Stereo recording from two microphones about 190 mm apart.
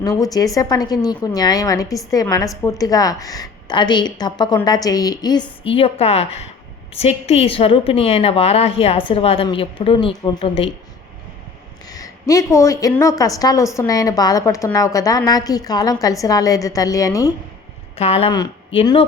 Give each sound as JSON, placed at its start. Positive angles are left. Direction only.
{"t": 0.0, "sound": "a woman's voice", "side_deg": 20}
{"t": 11.9, "sound": "a woman's voice", "side_deg": 20}
{"t": 17.9, "sound": "a woman's voice", "side_deg": 30}